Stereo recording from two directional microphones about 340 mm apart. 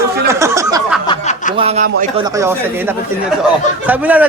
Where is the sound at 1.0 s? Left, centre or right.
Centre.